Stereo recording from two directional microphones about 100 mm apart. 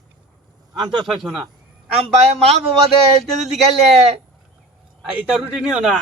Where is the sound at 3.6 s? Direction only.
90° right.